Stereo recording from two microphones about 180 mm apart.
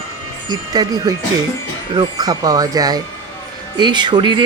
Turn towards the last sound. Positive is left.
turn(degrees=-25)  # may be behind; listen again after turning